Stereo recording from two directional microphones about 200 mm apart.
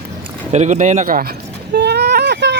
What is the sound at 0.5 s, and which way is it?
Speech, 35° right (ahead or behind).